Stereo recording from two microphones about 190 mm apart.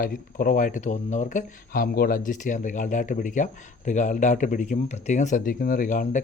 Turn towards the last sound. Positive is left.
turn(degrees=45)  # may be behind; listen again after turning